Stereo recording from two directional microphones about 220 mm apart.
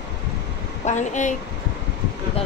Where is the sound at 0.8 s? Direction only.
35° left (ahead or behind).